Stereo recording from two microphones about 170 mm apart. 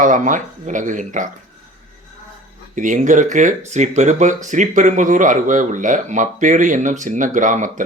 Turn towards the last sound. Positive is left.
turn(degrees=-50)  # may be behind; listen again after turning